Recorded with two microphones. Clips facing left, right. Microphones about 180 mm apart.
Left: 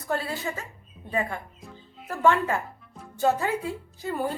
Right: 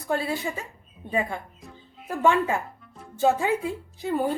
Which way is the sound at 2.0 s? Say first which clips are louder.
Right 1 dB; 15° right (ahead or behind).